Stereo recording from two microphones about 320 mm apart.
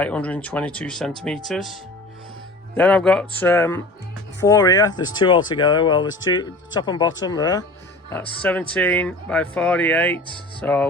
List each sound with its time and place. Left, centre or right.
0.0 s speech: centre
6.1 s speech: left
6.7 s speech: centre